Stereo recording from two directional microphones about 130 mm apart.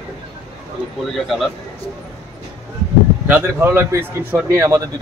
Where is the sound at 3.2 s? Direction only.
15° right (ahead or behind).